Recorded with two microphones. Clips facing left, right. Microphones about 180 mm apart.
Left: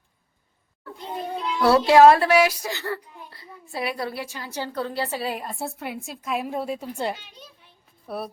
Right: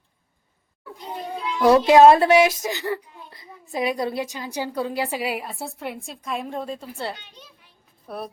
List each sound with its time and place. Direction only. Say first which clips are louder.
1.5 s speech: right 2 dB; 15° right (ahead or behind); by 6.8 s 10° left (ahead or behind)
8.0 s speech: left 1 dB; centre (ahead or behind)